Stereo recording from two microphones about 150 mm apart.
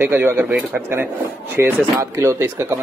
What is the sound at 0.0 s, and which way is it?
Speech, 15° right (ahead or behind).